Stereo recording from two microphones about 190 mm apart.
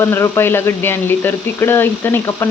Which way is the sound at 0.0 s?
15° left (ahead or behind).